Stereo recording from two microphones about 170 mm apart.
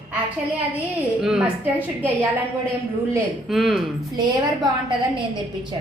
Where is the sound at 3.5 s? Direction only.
Centre (ahead or behind).